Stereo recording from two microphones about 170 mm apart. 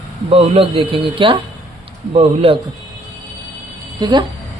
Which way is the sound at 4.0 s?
25° right (ahead or behind).